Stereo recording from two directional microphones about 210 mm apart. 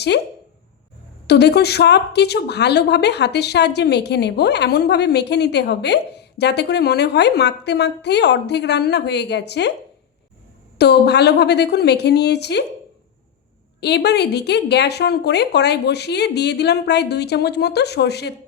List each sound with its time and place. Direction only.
1.3 s speech: 50° left (ahead or behind)
10.8 s speech: 50° left (ahead or behind)
13.8 s speech: 55° left (ahead or behind)